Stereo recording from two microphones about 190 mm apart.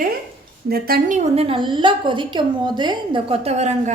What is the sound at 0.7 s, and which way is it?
A woman's voice, 50° right (ahead or behind).